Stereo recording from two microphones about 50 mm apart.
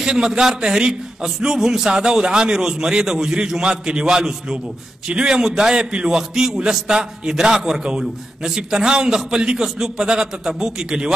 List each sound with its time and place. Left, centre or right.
0.0 s a man's voice: centre